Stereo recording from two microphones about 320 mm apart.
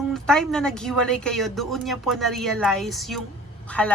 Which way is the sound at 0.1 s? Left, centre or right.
Centre.